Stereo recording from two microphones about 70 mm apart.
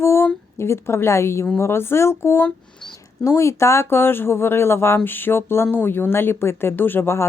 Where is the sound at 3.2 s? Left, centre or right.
Left.